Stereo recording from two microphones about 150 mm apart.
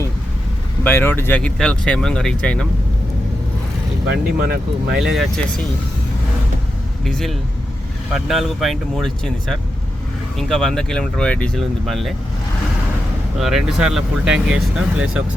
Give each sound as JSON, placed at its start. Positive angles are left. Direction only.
{"t": 0.9, "sound": "speech", "side_deg": 15}
{"t": 4.1, "sound": "speech", "side_deg": -90}
{"t": 4.9, "sound": "speech", "side_deg": -5}
{"t": 7.0, "sound": "speech", "side_deg": 0}
{"t": 13.4, "sound": "speech", "side_deg": -5}